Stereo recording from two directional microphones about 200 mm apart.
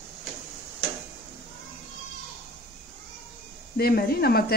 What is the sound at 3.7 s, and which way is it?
Speech, 50° left (ahead or behind).